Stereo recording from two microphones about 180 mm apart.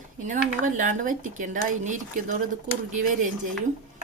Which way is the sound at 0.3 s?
45° right (ahead or behind).